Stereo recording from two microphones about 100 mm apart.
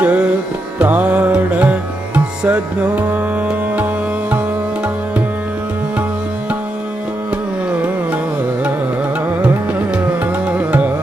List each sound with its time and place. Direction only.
0.0 s music: 15° right (ahead or behind)
9.4 s music: 10° right (ahead or behind)